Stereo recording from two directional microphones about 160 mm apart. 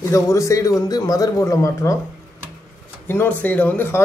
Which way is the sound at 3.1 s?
10° left (ahead or behind).